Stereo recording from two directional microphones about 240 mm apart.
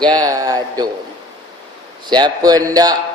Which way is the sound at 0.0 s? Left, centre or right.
Centre.